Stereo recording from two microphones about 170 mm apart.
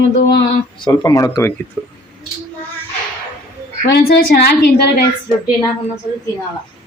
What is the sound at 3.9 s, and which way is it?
A woman's voice, 70° left (ahead or behind).